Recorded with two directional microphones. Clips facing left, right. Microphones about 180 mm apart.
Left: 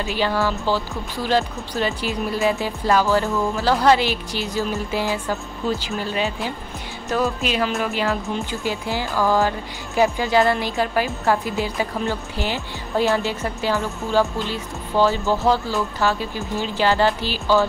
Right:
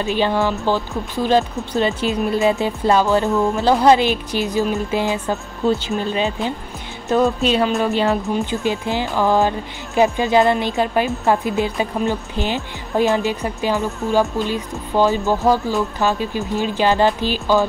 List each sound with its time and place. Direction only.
0.0 s speech: 20° right (ahead or behind)
8.4 s speech: 20° right (ahead or behind)